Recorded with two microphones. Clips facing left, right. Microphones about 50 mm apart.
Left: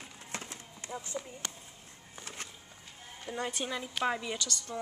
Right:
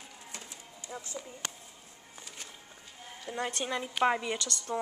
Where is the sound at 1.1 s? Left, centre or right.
Centre.